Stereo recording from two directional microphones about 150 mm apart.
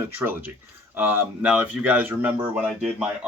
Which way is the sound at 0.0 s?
15° right (ahead or behind).